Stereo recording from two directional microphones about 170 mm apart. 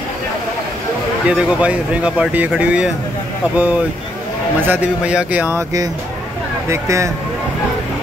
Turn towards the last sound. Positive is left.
turn(degrees=-15)  # may be behind; listen again after turning